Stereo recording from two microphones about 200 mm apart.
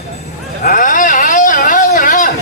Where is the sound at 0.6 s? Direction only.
40° left (ahead or behind).